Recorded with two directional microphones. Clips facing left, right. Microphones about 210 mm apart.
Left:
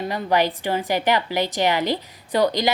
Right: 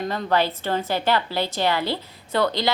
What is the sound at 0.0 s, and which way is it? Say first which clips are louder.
A woman's voice: left 1 dB; 10° left (ahead or behind).